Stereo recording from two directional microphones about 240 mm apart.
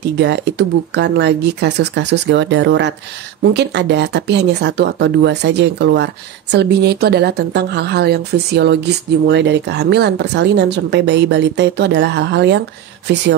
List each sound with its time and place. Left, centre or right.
0.2 s speech: right